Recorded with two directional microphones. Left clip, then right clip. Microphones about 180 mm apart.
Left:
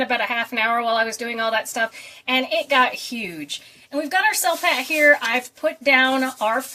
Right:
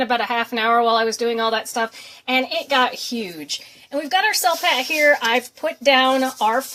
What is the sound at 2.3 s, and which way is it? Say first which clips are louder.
Speech: even; 35° right (ahead or behind).